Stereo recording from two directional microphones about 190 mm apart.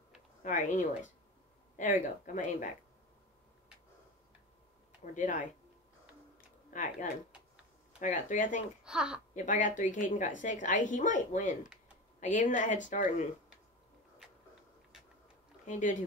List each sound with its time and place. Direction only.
0.4 s a woman's voice: 40° left (ahead or behind)
5.0 s speech: 40° left (ahead or behind)
6.7 s a woman's voice: 45° left (ahead or behind)
8.8 s speech: 5° right (ahead or behind)
9.3 s a woman's voice: 40° left (ahead or behind)
15.6 s speech: 40° left (ahead or behind)